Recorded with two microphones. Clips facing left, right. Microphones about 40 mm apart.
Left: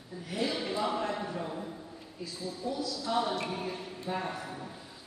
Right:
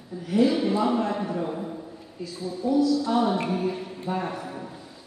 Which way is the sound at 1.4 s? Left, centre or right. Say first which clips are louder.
Right 7 dB; right.